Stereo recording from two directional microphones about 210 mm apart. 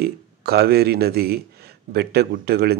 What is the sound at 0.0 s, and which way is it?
Speech, 50° right (ahead or behind).